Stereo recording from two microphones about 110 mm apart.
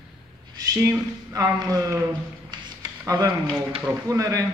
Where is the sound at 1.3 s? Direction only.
35° right (ahead or behind).